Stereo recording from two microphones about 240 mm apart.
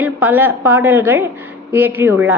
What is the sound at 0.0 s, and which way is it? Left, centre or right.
A woman's voice, centre.